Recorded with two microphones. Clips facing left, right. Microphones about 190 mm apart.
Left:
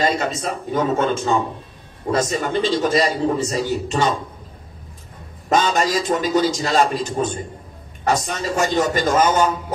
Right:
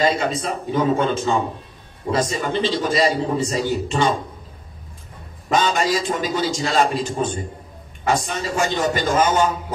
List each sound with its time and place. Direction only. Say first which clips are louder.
0.0 s a man's voice: right 1 dB; 45° left (ahead or behind)
5.5 s a man's voice: left 1 dB; 45° left (ahead or behind)